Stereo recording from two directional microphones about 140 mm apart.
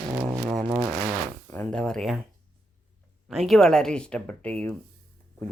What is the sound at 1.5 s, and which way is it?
Speech, 10° left (ahead or behind).